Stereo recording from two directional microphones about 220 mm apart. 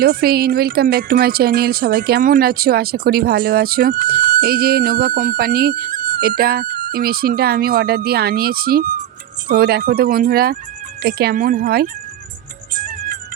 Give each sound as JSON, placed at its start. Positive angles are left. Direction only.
{"t": 0.0, "sound": "speech", "side_deg": -45}
{"t": 12.7, "sound": "music", "side_deg": -40}